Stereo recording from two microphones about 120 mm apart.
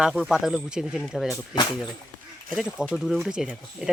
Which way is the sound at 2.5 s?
5° right (ahead or behind).